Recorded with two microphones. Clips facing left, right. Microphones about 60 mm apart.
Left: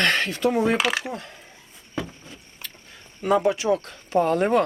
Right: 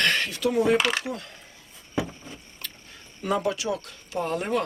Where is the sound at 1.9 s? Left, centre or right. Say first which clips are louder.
Right 2 dB; centre.